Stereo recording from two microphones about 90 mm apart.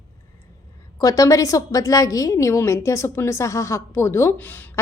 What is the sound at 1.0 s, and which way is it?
Speech, 40° left (ahead or behind).